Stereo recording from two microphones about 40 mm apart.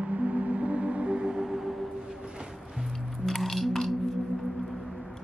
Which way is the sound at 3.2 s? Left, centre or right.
Centre.